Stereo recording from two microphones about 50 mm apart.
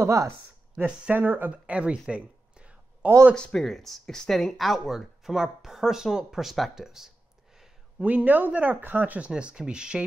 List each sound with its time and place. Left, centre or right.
0.0 s speech: right
1.1 s speech: right
1.5 s a sound: right
3.3 s speech: centre
3.6 s speech: centre
8.0 s speech: right
9.3 s speech: centre